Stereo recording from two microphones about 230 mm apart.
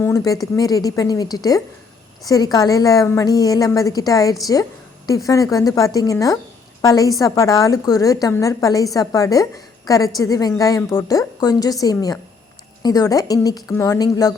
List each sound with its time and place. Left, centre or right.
0.0 s a woman's voice: centre